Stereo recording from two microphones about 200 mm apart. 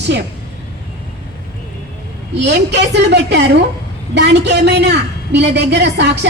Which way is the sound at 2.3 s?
60° right (ahead or behind).